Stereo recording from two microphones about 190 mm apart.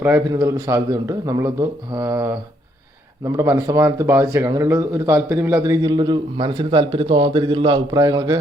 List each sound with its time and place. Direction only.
0.0 s a man's voice: 15° right (ahead or behind)
3.3 s speech: 15° right (ahead or behind)